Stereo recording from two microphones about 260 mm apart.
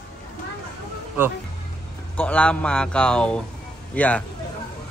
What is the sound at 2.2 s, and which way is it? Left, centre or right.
A man's voice, centre.